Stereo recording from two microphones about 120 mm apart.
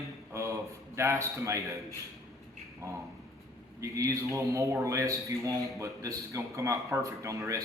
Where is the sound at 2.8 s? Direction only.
25° right (ahead or behind).